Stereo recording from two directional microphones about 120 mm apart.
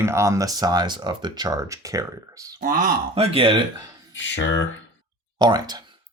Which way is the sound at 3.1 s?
55° right (ahead or behind).